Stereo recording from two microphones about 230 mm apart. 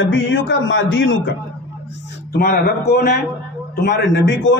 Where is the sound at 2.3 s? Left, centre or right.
Left.